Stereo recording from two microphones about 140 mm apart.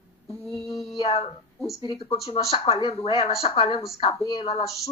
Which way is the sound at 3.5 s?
45° left (ahead or behind).